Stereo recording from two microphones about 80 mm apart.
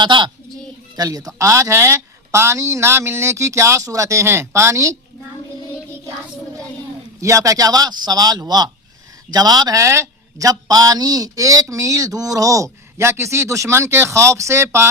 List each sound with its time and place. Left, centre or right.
0.0 s a child's voice: right
0.9 s speech: right
7.2 s a man's voice: right
9.8 s a man's voice: right